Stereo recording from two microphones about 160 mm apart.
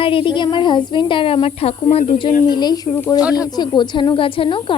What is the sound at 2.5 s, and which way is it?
A woman's voice, 25° left (ahead or behind).